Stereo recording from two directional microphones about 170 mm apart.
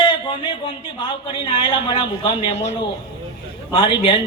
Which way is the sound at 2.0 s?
30° left (ahead or behind).